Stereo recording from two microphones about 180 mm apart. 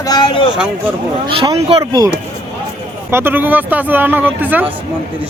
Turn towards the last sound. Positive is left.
turn(degrees=-10)  # may be behind; listen again after turning